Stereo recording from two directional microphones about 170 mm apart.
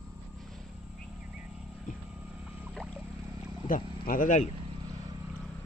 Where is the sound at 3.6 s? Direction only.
55° left (ahead or behind).